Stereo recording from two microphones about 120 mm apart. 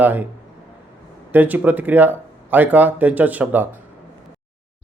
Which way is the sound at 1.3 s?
15° right (ahead or behind).